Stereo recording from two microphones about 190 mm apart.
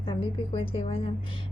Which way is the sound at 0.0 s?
25° left (ahead or behind).